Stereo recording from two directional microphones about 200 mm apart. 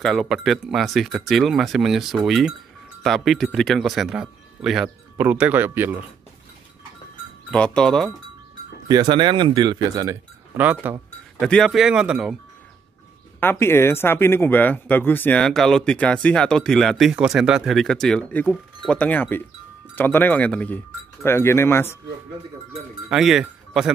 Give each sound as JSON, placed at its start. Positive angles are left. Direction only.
{"t": 0.0, "sound": "speech", "side_deg": 0}
{"t": 7.5, "sound": "speech", "side_deg": 5}
{"t": 8.8, "sound": "speech", "side_deg": -20}
{"t": 11.4, "sound": "speech", "side_deg": 5}
{"t": 13.4, "sound": "speech", "side_deg": 10}
{"t": 23.0, "sound": "speech", "side_deg": 0}